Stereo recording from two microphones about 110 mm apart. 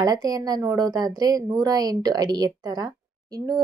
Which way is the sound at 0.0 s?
35° right (ahead or behind).